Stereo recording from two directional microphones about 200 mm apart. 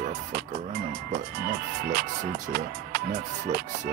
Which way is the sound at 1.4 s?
55° right (ahead or behind).